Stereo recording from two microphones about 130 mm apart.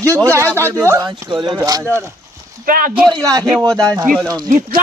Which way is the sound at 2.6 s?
90° right.